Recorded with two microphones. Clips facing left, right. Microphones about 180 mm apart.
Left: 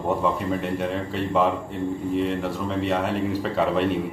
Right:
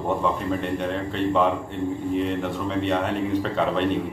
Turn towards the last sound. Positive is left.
turn(degrees=5)  # may be behind; listen again after turning